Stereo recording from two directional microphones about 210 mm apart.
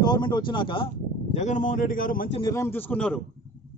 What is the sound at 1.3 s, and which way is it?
Speech, 35° left (ahead or behind).